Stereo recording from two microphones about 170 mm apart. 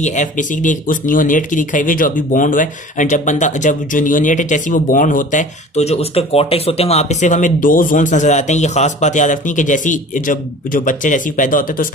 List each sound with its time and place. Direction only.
0.0 s speech: 45° left (ahead or behind)